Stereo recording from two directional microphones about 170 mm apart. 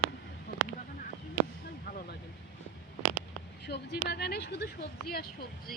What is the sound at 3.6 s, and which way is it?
Speech, 70° left (ahead or behind).